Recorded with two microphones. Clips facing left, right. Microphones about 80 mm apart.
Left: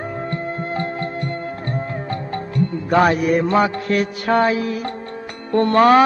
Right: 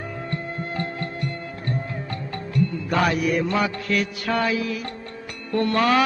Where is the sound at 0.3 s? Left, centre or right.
Left.